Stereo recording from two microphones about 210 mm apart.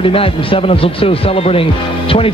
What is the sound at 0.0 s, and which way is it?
Speech, 25° left (ahead or behind).